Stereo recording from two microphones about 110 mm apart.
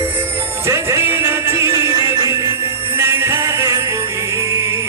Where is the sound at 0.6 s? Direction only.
25° right (ahead or behind).